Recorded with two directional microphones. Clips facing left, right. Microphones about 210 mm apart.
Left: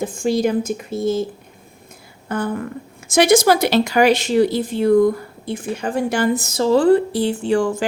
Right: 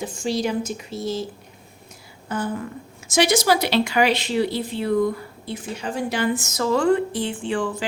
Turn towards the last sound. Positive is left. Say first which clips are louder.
# left 7 dB
turn(degrees=45)  # may be behind; listen again after turning